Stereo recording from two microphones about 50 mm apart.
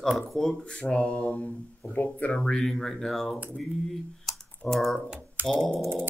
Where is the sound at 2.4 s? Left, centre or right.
Centre.